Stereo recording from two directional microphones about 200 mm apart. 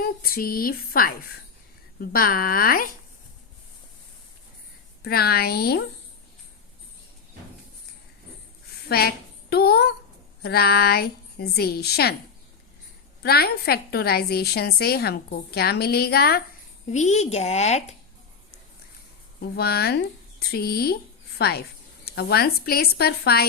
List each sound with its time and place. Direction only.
0.0 s a woman's voice: 50° left (ahead or behind)
5.0 s a woman's voice: 50° left (ahead or behind)
8.9 s a woman's voice: 50° left (ahead or behind)
13.2 s a woman's voice: 50° left (ahead or behind)
16.9 s a woman's voice: 35° left (ahead or behind)
19.4 s a woman's voice: 55° left (ahead or behind)